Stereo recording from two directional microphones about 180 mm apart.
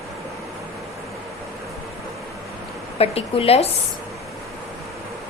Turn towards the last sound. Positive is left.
turn(degrees=35)  # may be behind; listen again after turning